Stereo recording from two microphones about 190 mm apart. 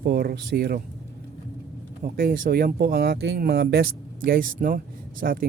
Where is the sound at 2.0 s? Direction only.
50° right (ahead or behind).